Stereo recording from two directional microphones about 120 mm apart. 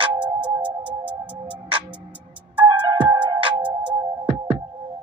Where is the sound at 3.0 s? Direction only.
40° right (ahead or behind).